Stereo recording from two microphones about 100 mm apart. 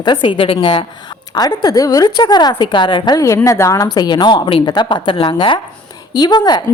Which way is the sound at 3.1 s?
35° left (ahead or behind).